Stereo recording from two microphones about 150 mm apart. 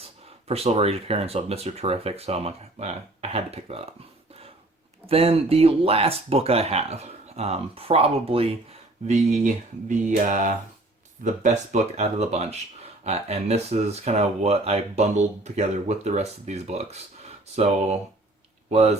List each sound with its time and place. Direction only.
0.4 s speech: 45° right (ahead or behind)
5.0 s speech: 40° right (ahead or behind)
10.1 s a sound: 55° right (ahead or behind)
11.2 s speech: 55° right (ahead or behind)